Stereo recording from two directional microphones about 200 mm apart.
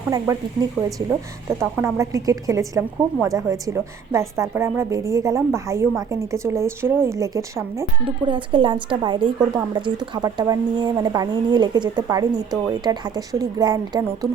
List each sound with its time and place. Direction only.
1.5 s a woman's voice: 15° right (ahead or behind)
8.0 s speech: 25° right (ahead or behind)